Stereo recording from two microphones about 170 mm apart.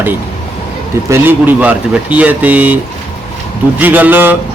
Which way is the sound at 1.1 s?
10° right (ahead or behind).